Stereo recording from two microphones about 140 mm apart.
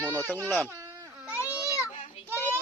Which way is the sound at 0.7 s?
20° right (ahead or behind).